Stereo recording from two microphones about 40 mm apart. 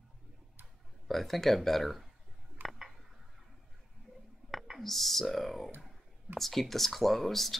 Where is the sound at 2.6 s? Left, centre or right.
Right.